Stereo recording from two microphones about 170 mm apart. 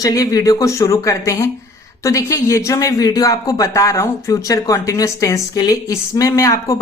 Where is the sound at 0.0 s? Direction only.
20° left (ahead or behind).